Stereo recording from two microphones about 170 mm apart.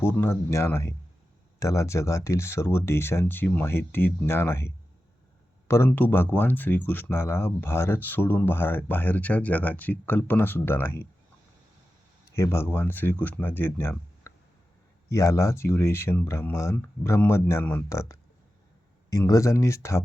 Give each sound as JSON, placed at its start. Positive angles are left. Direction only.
{"t": 0.0, "sound": "speech", "side_deg": 15}
{"t": 12.3, "sound": "speech", "side_deg": 15}